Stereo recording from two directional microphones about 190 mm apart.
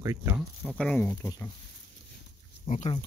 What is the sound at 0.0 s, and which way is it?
Speech, 15° right (ahead or behind).